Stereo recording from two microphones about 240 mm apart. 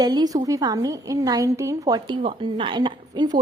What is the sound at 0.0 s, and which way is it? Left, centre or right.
A woman's voice, centre.